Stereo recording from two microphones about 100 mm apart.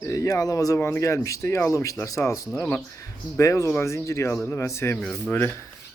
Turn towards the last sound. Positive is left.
turn(degrees=25)  # may be behind; listen again after turning